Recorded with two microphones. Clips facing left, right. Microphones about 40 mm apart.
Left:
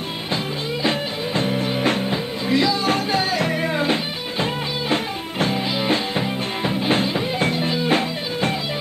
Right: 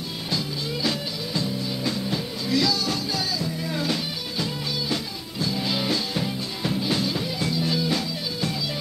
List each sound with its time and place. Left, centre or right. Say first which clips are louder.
0.8 s music: left 7 dB; left
2.0 s music: left 5 dB; left
3.3 s music: left 8 dB; left
3.7 s music: left 6 dB; left
5.6 s music: left 4 dB; left